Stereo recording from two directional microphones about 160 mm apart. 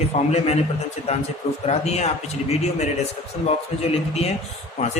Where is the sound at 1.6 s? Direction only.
40° left (ahead or behind).